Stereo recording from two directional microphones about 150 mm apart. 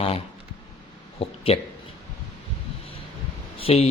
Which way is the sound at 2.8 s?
40° left (ahead or behind).